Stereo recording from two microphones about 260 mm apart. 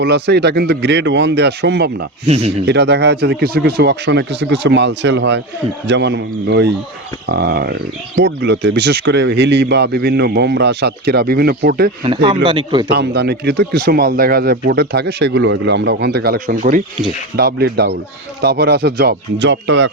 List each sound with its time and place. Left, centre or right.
0.0 s speech: right
2.2 s a man's voice: right
2.6 s speech: right
12.0 s a man's voice: right
12.9 s speech: right